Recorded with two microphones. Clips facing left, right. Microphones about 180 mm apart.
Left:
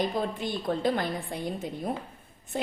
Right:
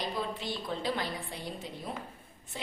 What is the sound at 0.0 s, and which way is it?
A woman's voice, 50° left (ahead or behind).